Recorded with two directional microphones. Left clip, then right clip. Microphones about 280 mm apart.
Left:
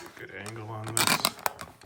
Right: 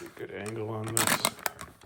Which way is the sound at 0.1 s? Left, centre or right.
Centre.